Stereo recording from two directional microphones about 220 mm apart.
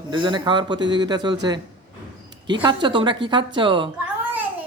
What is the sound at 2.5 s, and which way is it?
A woman's voice, 20° right (ahead or behind).